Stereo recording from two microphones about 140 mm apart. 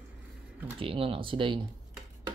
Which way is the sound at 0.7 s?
40° right (ahead or behind).